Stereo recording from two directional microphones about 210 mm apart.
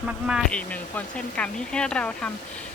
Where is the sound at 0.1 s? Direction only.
5° right (ahead or behind).